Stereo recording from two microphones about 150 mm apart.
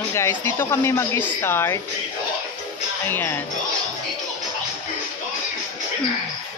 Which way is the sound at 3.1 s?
15° left (ahead or behind).